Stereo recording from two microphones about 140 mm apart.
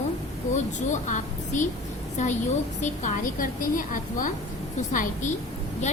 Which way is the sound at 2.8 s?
70° left (ahead or behind).